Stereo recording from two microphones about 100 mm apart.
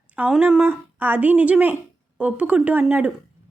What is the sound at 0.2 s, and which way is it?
Speech, 10° right (ahead or behind).